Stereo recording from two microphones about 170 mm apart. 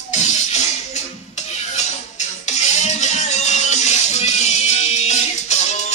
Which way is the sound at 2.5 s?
40° left (ahead or behind).